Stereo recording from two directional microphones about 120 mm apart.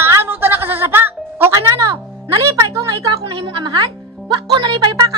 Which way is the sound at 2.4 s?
25° right (ahead or behind).